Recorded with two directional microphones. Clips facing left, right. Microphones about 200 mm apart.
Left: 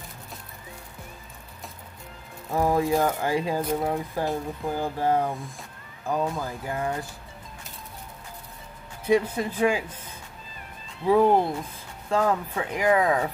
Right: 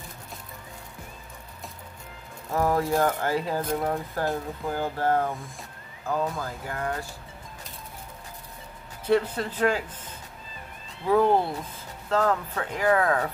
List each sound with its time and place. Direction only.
2.5 s speech: 15° left (ahead or behind)
9.0 s speech: 10° left (ahead or behind)
11.1 s speech: 15° left (ahead or behind)